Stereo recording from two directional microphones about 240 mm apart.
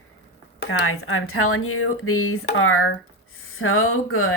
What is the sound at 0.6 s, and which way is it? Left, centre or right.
Speech, left.